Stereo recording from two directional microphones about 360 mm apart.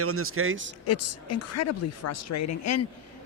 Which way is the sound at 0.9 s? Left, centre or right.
Left.